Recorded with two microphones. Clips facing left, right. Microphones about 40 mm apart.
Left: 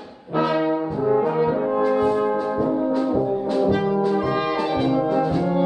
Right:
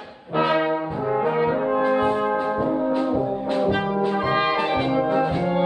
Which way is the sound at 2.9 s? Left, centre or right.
Right.